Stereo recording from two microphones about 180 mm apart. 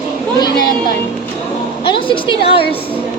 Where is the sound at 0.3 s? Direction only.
20° left (ahead or behind).